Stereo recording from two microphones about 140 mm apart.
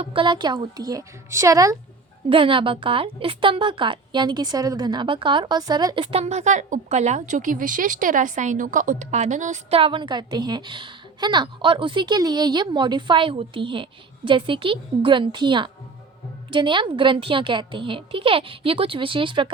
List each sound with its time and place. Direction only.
0.0 s a woman's voice: 40° right (ahead or behind); by 1.7 s 25° right (ahead or behind)
2.3 s a woman's voice: 40° right (ahead or behind)